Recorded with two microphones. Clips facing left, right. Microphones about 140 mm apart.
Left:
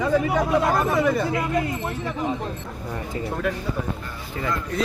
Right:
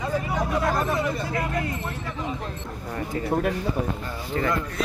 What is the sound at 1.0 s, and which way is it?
Speech, 70° left (ahead or behind).